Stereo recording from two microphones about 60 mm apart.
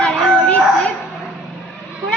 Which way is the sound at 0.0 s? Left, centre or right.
Centre.